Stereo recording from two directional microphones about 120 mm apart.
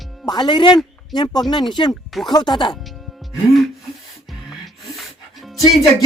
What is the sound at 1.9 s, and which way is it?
Speech, centre (ahead or behind).